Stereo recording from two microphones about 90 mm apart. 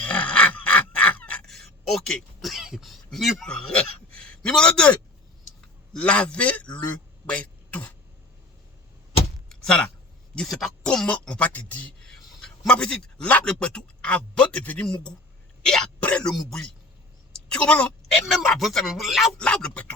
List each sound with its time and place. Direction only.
0.0 s dog: 15° left (ahead or behind)
1.5 s a man's voice: 5° left (ahead or behind)
9.5 s a sound: 10° left (ahead or behind)
10.3 s speech: centre (ahead or behind)
12.0 s speech: 5° left (ahead or behind)
18.5 s speech: centre (ahead or behind)
19.4 s speech: 10° left (ahead or behind)